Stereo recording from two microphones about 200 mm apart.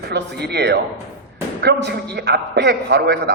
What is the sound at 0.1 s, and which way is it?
A man's voice, 55° right (ahead or behind).